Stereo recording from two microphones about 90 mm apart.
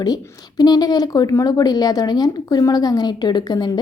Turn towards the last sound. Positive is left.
turn(degrees=55)  # may be behind; listen again after turning